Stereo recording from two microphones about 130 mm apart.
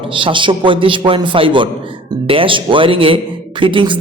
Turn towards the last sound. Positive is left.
turn(degrees=-40)  # may be behind; listen again after turning